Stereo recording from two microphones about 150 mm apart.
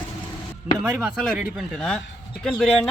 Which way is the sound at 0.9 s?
10° right (ahead or behind).